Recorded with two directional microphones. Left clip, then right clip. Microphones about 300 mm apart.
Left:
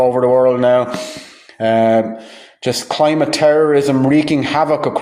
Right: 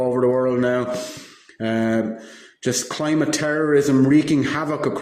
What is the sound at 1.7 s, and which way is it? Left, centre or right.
Speech, left.